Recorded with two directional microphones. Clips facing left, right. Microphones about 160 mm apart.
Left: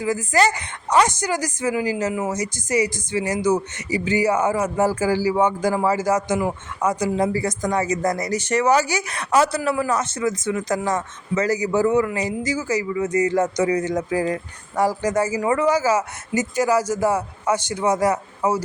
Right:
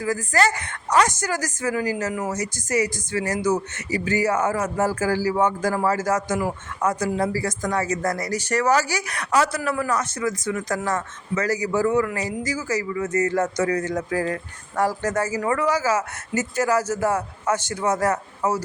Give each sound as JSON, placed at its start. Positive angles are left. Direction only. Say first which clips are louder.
{"t": 0.0, "sound": "speech", "louder": "left 2 dB", "side_deg": 20}